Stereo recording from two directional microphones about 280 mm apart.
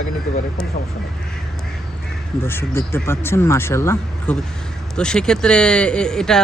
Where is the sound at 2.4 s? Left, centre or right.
Centre.